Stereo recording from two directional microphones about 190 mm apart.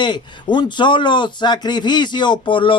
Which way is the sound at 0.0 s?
25° left (ahead or behind).